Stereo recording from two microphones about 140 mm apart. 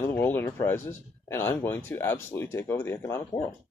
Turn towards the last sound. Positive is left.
turn(degrees=20)  # may be behind; listen again after turning